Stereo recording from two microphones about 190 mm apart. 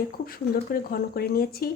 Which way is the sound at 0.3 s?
50° left (ahead or behind).